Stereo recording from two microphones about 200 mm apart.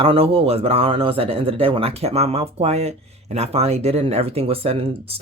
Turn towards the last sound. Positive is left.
turn(degrees=-30)  # may be behind; listen again after turning